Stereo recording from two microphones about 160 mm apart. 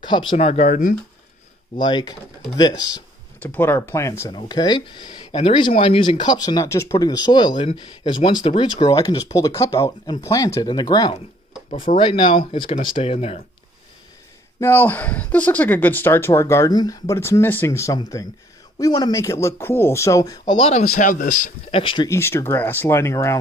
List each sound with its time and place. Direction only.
0.0 s speech: 30° left (ahead or behind); by 0.9 s 55° left (ahead or behind)
1.8 s speech: 25° left (ahead or behind)
3.3 s speech: 15° left (ahead or behind); by 13.4 s 40° left (ahead or behind)
14.6 s speech: 15° left (ahead or behind)
20.6 s speech: 50° left (ahead or behind)
21.7 s speech: 30° left (ahead or behind)
22.1 s speech: 15° left (ahead or behind)